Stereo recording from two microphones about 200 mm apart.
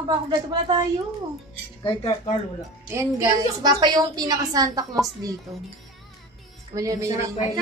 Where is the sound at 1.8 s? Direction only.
25° left (ahead or behind).